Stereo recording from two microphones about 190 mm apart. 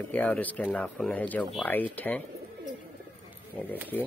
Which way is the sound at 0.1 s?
10° left (ahead or behind).